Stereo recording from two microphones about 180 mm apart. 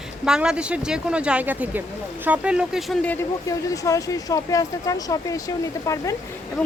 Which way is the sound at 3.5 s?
20° left (ahead or behind).